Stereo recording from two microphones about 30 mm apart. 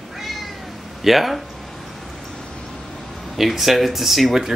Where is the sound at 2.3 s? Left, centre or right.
Left.